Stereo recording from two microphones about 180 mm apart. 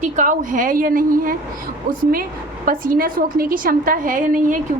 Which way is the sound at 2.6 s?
50° right (ahead or behind).